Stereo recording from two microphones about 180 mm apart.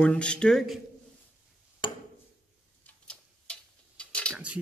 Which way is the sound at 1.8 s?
25° left (ahead or behind).